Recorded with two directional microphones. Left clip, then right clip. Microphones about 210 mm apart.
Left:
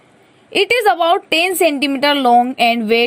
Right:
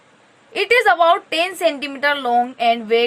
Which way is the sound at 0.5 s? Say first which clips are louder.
Left 1 dB; 30° left (ahead or behind).